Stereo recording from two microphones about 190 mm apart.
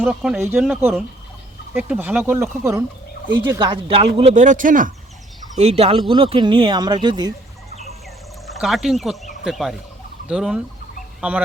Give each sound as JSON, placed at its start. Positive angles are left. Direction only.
{"t": 0.0, "sound": "speech", "side_deg": -5}
{"t": 3.4, "sound": "speech", "side_deg": -25}
{"t": 5.5, "sound": "speech", "side_deg": -35}
{"t": 8.4, "sound": "speech", "side_deg": 0}
{"t": 11.2, "sound": "fowl", "side_deg": -5}